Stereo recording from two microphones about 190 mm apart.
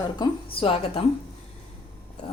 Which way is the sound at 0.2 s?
30° left (ahead or behind).